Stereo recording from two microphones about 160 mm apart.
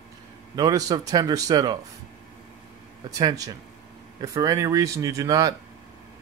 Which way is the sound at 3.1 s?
25° right (ahead or behind).